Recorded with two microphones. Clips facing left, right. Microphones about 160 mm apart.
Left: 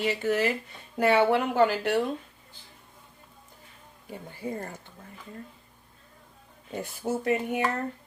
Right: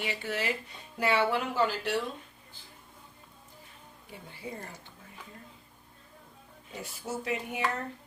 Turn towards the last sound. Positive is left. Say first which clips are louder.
# left 7 dB
turn(degrees=55)  # may be behind; listen again after turning